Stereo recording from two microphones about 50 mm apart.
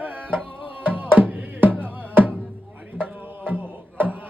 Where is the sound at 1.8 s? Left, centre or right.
Right.